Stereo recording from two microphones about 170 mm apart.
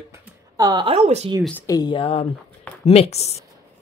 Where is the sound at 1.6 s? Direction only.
25° left (ahead or behind).